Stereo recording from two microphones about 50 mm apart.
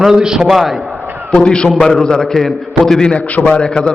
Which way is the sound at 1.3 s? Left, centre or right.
Centre.